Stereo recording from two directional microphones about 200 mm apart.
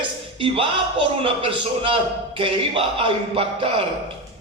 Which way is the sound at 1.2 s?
25° right (ahead or behind).